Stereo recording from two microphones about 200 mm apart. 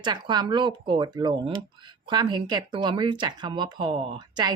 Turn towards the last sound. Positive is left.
turn(degrees=-20)  # may be behind; listen again after turning